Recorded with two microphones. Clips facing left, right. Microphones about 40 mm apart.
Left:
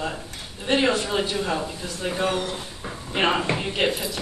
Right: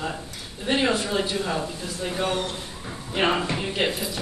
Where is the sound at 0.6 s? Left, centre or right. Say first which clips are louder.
Left 1 dB; centre.